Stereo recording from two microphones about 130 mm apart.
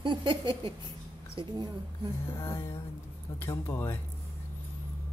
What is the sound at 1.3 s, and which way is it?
Speech, 40° right (ahead or behind).